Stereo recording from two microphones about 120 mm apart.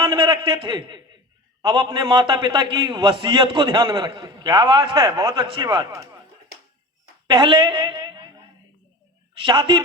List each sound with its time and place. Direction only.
0.0 s a man's voice: 35° right (ahead or behind)
7.3 s a sound: 40° right (ahead or behind)
9.4 s a man's voice: 40° right (ahead or behind)